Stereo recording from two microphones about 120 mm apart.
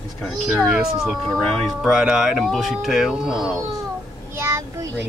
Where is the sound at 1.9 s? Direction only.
5° right (ahead or behind).